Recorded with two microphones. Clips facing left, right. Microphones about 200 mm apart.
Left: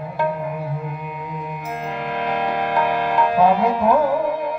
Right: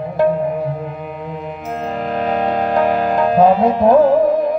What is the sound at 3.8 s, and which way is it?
Music, 25° right (ahead or behind).